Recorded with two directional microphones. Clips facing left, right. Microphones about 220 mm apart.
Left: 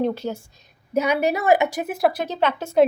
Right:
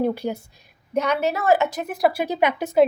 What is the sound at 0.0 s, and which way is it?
Speech, 15° right (ahead or behind).